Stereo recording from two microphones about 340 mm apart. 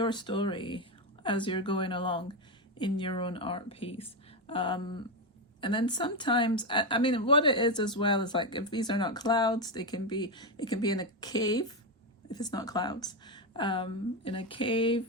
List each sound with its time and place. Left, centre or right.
0.0 s speech: centre